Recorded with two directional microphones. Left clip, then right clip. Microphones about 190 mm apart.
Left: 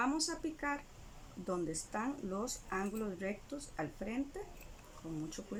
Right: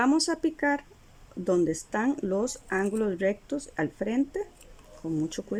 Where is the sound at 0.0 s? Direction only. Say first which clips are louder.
Right 11 dB; 60° right (ahead or behind).